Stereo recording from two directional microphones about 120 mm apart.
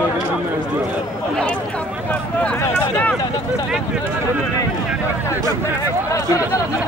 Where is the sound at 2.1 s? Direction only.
10° left (ahead or behind).